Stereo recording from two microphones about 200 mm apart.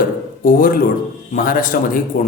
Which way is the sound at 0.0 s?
45° left (ahead or behind).